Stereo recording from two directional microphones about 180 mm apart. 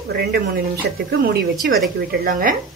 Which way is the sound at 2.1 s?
50° right (ahead or behind).